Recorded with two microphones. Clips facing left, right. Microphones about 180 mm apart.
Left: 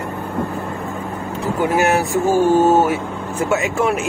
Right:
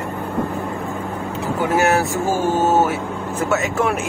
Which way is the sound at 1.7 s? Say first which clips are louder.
Even; 20° left (ahead or behind).